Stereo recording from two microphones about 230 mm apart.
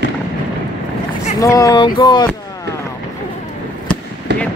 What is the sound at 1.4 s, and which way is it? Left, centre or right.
Speech, centre.